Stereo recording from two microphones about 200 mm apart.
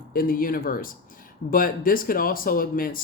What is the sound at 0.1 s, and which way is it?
Speech, 45° left (ahead or behind).